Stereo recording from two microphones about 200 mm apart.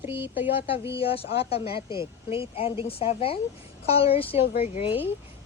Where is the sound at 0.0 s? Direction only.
10° right (ahead or behind).